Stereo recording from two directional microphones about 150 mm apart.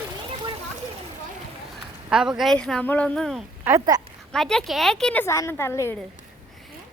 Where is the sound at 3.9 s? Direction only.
25° right (ahead or behind).